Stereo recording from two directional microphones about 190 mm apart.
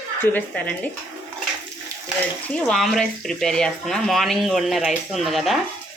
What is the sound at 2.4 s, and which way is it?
Speech, 5° left (ahead or behind).